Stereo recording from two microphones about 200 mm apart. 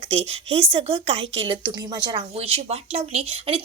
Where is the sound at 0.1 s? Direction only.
30° right (ahead or behind).